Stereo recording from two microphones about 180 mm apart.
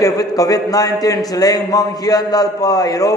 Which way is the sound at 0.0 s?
20° left (ahead or behind).